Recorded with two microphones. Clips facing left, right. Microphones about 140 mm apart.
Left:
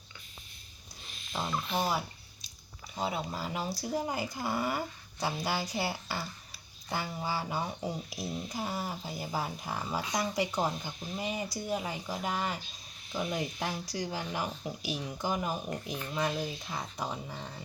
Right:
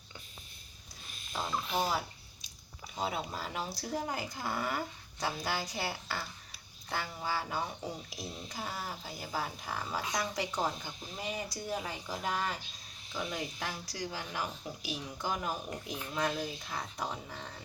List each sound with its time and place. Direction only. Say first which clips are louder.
1.3 s speech: left 2 dB; 5° left (ahead or behind)
1.6 s speech: even; 10° right (ahead or behind)
2.9 s speech: left 2 dB; centre (ahead or behind)
15.7 s speech: left 3 dB; 5° right (ahead or behind)
16.1 s speech: left 1 dB; 5° left (ahead or behind)